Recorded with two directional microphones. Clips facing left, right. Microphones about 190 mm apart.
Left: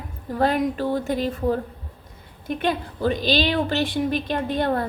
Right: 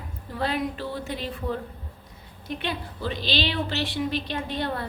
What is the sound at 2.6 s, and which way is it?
A woman's voice, 45° left (ahead or behind).